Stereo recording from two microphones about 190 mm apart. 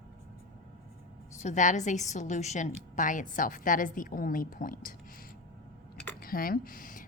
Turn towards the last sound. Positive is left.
turn(degrees=45)  # may be behind; listen again after turning